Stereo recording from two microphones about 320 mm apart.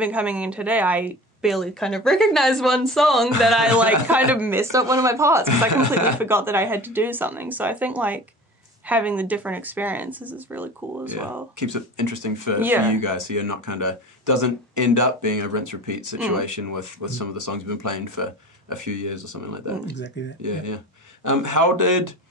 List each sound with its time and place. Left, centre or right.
0.0 s speech: centre
5.7 s speech: right
6.1 s speech: centre
11.6 s speech: right
12.5 s speech: centre
12.8 s speech: right
19.9 s speech: left
20.4 s speech: right